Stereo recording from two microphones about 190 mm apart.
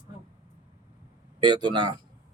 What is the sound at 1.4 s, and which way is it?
Speech, 25° right (ahead or behind).